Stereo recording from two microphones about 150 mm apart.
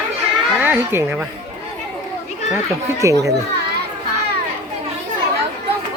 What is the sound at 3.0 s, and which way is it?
Speech, 20° right (ahead or behind).